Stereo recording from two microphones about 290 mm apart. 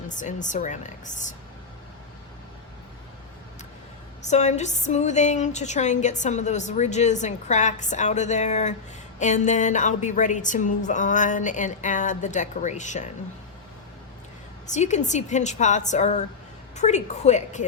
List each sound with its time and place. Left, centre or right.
0.1 s a woman's voice: left
4.2 s a woman's voice: left
14.7 s a woman's voice: left